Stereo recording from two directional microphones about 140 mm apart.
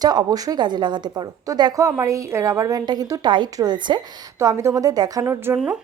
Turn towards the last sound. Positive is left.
turn(degrees=-5)  # may be behind; listen again after turning